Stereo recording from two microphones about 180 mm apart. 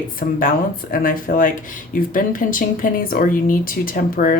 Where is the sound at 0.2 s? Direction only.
50° left (ahead or behind).